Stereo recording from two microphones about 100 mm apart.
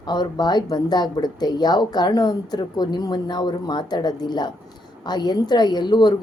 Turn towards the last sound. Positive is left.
turn(degrees=45)  # may be behind; listen again after turning